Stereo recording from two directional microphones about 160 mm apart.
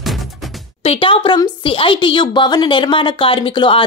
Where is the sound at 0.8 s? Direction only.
35° left (ahead or behind).